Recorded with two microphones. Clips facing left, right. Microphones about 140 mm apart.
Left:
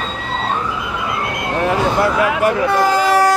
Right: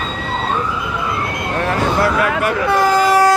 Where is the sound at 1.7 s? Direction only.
15° left (ahead or behind).